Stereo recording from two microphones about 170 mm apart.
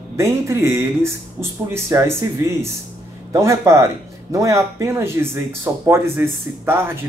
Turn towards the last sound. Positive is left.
turn(degrees=-15)  # may be behind; listen again after turning